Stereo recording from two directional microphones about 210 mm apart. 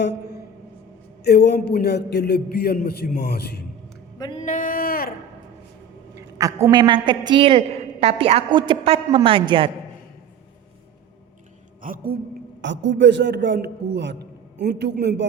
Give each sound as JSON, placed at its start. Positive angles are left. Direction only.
{"t": 1.2, "sound": "a man's voice", "side_deg": 50}
{"t": 4.2, "sound": "a sound", "side_deg": 25}
{"t": 4.4, "sound": "a sound", "side_deg": 40}
{"t": 6.1, "sound": "a man's voice", "side_deg": -15}
{"t": 11.8, "sound": "a woman's voice", "side_deg": -40}
{"t": 12.6, "sound": "a man's voice", "side_deg": -60}